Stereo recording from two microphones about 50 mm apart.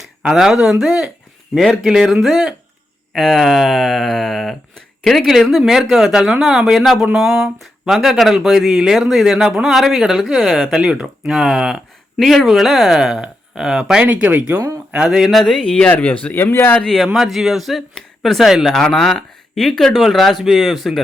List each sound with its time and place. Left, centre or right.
0.2 s a man's voice: centre
12.2 s speech: centre
13.0 s speech: centre
14.0 s speech: right
15.4 s speech: centre
15.9 s speech: left
16.3 s speech: left
17.2 s speech: centre
18.7 s speech: centre